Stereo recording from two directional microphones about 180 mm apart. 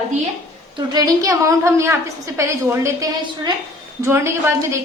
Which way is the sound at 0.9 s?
20° right (ahead or behind).